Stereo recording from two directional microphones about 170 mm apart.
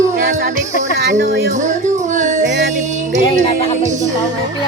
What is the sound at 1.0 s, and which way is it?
Speech, 80° right.